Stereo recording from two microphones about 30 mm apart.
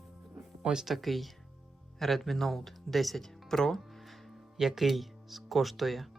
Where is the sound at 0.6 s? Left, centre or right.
Right.